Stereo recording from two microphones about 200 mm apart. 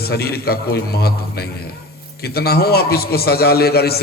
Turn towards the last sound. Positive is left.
turn(degrees=50)  # may be behind; listen again after turning